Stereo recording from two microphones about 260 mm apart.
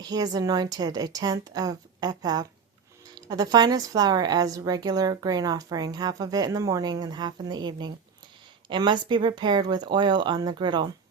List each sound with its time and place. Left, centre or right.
0.0 s a woman's voice: centre